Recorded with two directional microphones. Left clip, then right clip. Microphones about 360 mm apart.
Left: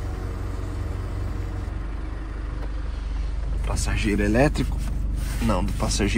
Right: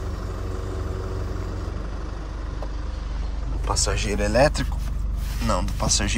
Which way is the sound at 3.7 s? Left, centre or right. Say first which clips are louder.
Right 2 dB; centre.